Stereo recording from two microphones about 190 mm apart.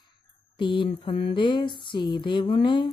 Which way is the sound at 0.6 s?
25° left (ahead or behind).